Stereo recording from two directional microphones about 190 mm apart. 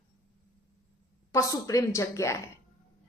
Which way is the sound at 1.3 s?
15° left (ahead or behind).